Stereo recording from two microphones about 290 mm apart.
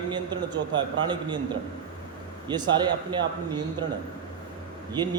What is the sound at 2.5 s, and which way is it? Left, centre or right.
Speech, centre.